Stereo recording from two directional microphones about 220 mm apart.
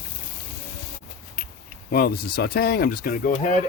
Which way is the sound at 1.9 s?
45° left (ahead or behind).